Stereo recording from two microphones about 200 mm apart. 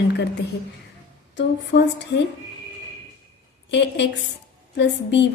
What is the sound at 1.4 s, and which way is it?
Speech, 60° left (ahead or behind).